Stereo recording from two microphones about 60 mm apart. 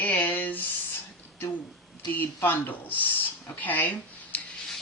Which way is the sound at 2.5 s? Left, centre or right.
Left.